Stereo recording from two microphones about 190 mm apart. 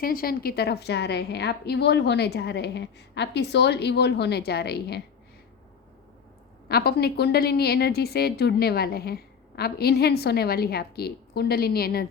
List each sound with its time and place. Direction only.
0.0 s a woman's voice: 50° left (ahead or behind)
6.7 s a woman's voice: 55° left (ahead or behind)